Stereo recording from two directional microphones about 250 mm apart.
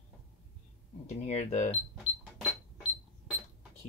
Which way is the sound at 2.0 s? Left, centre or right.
Centre.